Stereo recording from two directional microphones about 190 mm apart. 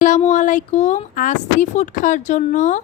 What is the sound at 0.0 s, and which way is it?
Speech, 40° left (ahead or behind).